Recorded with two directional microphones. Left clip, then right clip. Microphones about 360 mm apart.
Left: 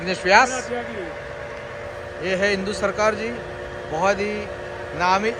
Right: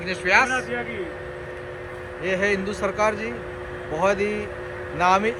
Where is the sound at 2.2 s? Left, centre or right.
Centre.